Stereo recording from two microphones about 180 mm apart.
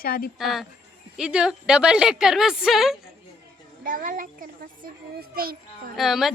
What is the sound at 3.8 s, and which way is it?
A child's voice, 50° right (ahead or behind).